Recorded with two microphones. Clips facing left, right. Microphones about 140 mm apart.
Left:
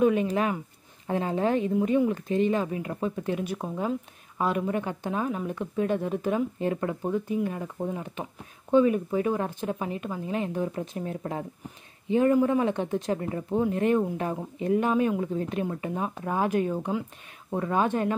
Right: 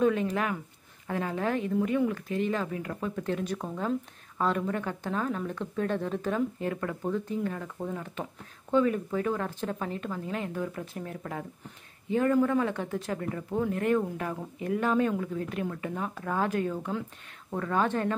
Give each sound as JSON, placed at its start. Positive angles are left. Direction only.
{"t": 0.0, "sound": "speech", "side_deg": 15}
{"t": 15.3, "sound": "speech", "side_deg": 25}